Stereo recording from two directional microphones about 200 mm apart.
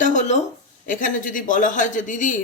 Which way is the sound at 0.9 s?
40° left (ahead or behind).